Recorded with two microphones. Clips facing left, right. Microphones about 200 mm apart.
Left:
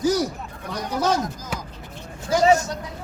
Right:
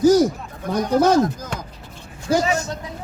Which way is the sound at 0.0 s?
45° right (ahead or behind).